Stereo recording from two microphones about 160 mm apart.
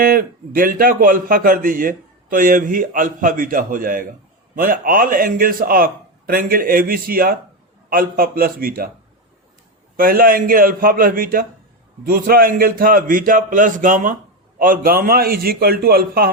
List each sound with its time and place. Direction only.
0.0 s a man's voice: 65° right (ahead or behind)
10.0 s a man's voice: 65° right (ahead or behind)